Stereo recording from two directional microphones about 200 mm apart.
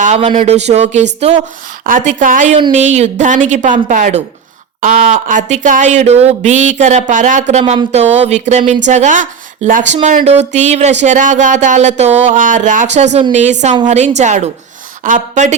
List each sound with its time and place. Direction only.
0.0 s speech: 35° right (ahead or behind)